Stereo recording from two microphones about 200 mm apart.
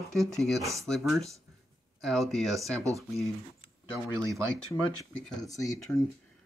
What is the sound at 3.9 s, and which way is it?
Speech, 15° right (ahead or behind).